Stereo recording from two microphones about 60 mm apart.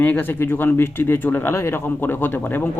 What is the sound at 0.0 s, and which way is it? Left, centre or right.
Speech, left.